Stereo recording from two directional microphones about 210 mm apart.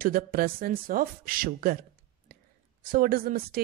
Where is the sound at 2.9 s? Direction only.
45° right (ahead or behind).